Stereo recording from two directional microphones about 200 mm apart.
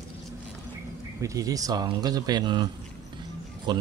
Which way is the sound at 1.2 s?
15° right (ahead or behind).